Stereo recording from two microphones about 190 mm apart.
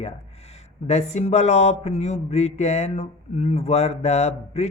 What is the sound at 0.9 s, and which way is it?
Speech, 35° left (ahead or behind).